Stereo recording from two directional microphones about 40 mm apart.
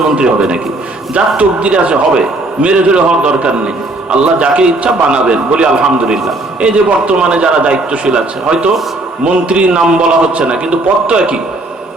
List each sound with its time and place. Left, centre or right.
0.2 s a man's voice: right